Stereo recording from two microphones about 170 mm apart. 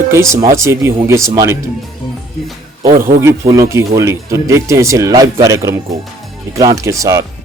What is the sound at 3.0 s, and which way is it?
Speech, 55° right (ahead or behind).